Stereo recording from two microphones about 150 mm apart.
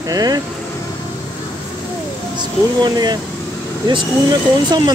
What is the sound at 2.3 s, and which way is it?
Speech, 30° right (ahead or behind).